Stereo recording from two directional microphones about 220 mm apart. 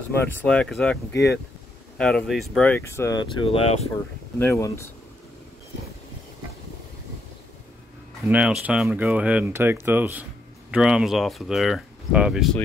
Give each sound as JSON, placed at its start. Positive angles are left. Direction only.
{"t": 0.4, "sound": "speech", "side_deg": 5}
{"t": 2.0, "sound": "speech", "side_deg": 5}
{"t": 3.9, "sound": "speech", "side_deg": 10}
{"t": 8.3, "sound": "speech", "side_deg": -5}